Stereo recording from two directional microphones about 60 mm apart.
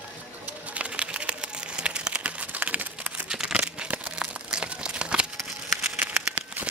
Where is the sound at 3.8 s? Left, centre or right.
Centre.